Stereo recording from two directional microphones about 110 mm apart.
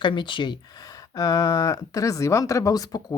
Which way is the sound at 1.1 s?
35° left (ahead or behind).